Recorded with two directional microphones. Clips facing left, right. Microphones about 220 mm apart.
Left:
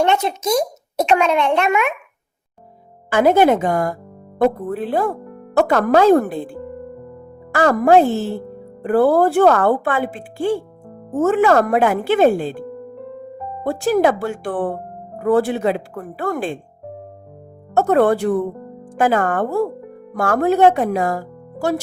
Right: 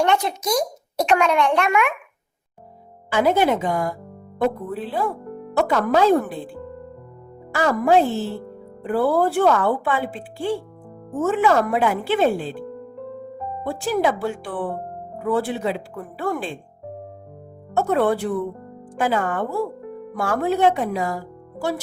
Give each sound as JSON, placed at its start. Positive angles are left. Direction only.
{"t": 0.0, "sound": "a child's voice", "side_deg": 25}
{"t": 3.1, "sound": "a woman's voice", "side_deg": 50}
{"t": 13.7, "sound": "a woman's voice", "side_deg": 45}
{"t": 17.7, "sound": "a woman's voice", "side_deg": 45}